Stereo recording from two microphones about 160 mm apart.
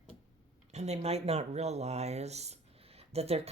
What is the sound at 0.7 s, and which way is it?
Speech, 45° right (ahead or behind).